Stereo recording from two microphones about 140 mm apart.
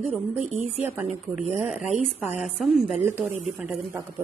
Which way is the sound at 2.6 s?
5° right (ahead or behind).